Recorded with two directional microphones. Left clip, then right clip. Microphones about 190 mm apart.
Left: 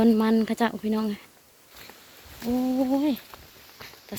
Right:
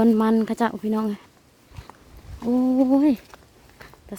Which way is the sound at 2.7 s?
50° right (ahead or behind).